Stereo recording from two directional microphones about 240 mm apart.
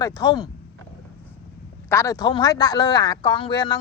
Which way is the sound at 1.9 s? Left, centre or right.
Centre.